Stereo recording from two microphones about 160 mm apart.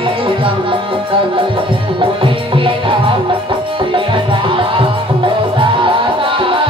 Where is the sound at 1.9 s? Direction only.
30° right (ahead or behind).